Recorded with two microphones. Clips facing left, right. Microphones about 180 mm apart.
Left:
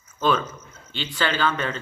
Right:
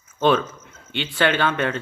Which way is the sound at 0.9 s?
60° right (ahead or behind).